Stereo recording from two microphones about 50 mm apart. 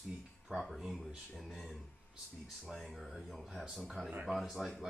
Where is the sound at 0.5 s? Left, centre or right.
Centre.